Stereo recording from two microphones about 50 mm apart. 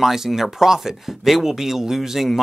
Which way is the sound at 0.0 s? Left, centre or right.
Centre.